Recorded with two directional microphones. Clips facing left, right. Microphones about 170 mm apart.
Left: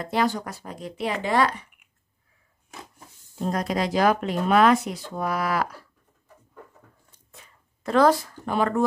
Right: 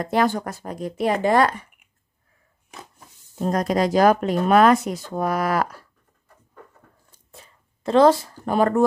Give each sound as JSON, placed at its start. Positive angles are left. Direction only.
{"t": 0.0, "sound": "speech", "side_deg": -50}
{"t": 3.3, "sound": "speech", "side_deg": -45}
{"t": 7.1, "sound": "a sound", "side_deg": -30}
{"t": 8.5, "sound": "speech", "side_deg": -45}